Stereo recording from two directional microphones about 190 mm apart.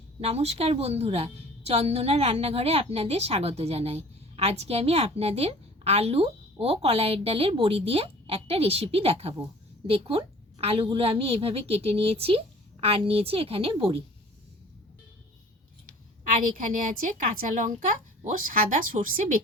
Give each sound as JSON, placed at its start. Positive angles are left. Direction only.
{"t": 0.2, "sound": "a woman's voice", "side_deg": -35}
{"t": 16.2, "sound": "a woman's voice", "side_deg": -40}